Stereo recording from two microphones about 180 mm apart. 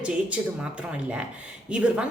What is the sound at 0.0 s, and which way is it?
Speech, 5° right (ahead or behind).